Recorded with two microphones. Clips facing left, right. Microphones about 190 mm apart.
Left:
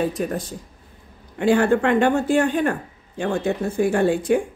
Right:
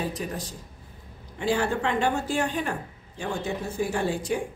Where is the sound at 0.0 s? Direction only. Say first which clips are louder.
Left 8 dB; 55° left (ahead or behind).